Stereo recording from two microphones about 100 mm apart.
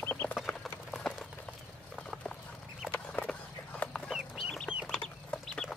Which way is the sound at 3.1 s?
10° left (ahead or behind).